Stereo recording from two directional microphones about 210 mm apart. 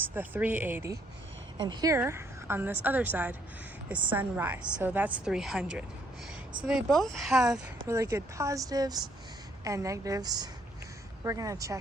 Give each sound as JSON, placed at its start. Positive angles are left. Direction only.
{"t": 0.1, "sound": "a woman's voice", "side_deg": -10}
{"t": 6.7, "sound": "speech", "side_deg": 0}
{"t": 7.9, "sound": "a woman's voice", "side_deg": -15}